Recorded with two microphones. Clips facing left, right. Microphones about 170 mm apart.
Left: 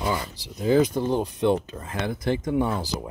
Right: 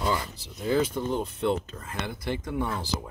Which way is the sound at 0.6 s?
15° left (ahead or behind).